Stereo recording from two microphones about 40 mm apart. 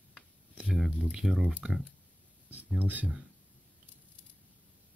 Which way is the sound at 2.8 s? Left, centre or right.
Right.